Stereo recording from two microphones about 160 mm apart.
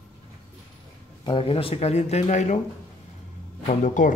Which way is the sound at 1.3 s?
35° left (ahead or behind).